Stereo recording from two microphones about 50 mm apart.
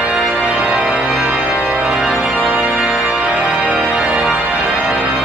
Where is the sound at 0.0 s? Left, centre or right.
Right.